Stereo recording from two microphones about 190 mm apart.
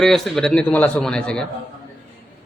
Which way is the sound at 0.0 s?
Centre (ahead or behind).